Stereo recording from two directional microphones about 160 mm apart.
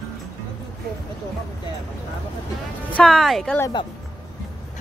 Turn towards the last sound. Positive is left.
turn(degrees=0)  # may be behind; listen again after turning